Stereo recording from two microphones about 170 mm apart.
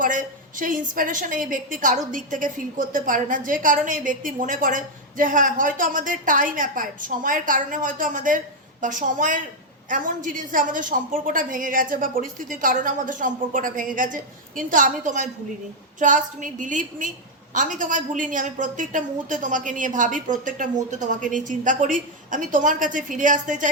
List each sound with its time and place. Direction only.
0.0 s a woman's voice: 50° right (ahead or behind)